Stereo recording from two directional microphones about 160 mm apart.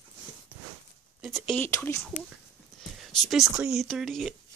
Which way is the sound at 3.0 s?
Centre (ahead or behind).